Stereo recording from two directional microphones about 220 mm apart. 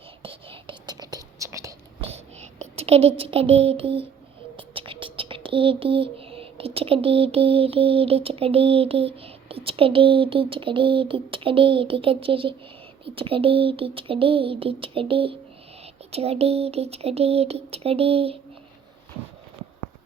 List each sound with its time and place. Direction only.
0.2 s whispering: 25° right (ahead or behind)
2.0 s a sound: 30° right (ahead or behind)
4.5 s speech: 25° right (ahead or behind)